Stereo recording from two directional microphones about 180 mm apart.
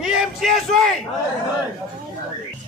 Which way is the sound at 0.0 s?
5° right (ahead or behind).